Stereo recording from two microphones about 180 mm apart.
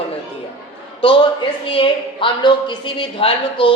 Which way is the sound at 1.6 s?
30° left (ahead or behind).